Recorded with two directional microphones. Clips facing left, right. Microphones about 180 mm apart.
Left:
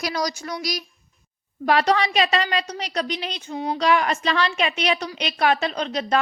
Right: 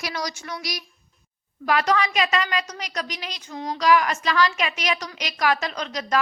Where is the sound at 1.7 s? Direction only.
30° left (ahead or behind).